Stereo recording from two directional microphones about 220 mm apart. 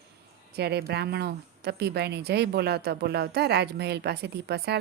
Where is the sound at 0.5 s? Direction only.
45° right (ahead or behind).